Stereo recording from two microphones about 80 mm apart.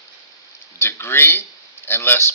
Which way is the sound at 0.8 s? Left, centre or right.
Left.